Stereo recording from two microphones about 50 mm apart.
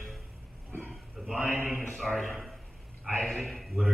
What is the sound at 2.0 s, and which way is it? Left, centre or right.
A man's voice, centre.